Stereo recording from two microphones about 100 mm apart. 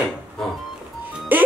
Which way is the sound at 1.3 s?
20° right (ahead or behind).